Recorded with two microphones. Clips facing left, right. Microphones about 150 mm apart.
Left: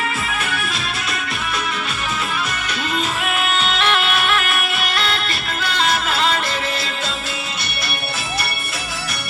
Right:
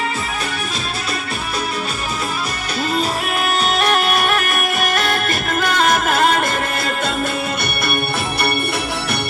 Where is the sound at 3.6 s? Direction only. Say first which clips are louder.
Right 5 dB; 40° right (ahead or behind).